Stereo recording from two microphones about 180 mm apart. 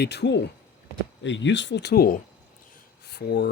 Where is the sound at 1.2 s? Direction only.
90° left.